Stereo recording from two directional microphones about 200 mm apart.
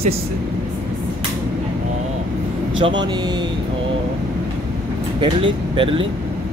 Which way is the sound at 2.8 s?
20° right (ahead or behind).